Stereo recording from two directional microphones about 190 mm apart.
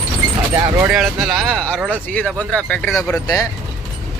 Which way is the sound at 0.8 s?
Centre (ahead or behind).